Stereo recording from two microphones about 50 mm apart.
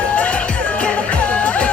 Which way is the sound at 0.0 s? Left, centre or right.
Left.